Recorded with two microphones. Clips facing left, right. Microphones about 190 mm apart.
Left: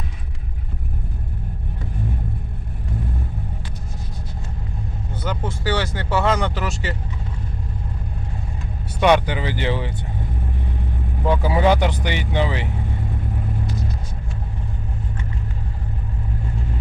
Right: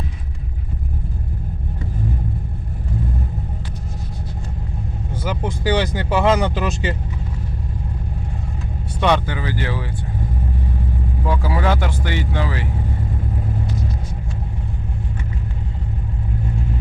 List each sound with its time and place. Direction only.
5.2 s speech: 10° right (ahead or behind)
9.0 s speech: 10° left (ahead or behind)
11.3 s speech: 20° left (ahead or behind)